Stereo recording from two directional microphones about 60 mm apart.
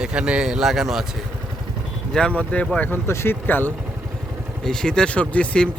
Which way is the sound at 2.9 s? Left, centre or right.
Left.